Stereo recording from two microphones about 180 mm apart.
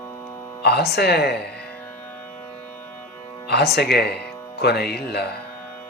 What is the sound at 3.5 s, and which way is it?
Speech, 65° left (ahead or behind).